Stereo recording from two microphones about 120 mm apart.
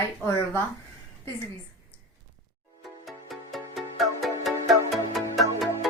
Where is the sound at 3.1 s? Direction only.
Centre (ahead or behind).